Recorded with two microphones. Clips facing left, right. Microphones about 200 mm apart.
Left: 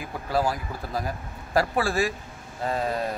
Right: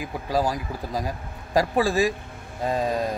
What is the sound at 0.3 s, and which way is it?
Speech, 15° right (ahead or behind).